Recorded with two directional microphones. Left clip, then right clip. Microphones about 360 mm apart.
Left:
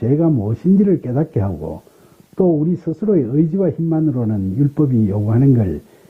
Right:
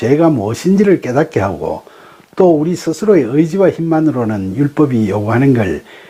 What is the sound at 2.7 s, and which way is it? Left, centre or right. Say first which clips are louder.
Speech: right 6 dB; centre.